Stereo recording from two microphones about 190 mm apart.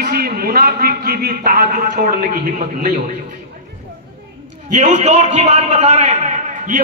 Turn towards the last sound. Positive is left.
turn(degrees=-40)  # may be behind; listen again after turning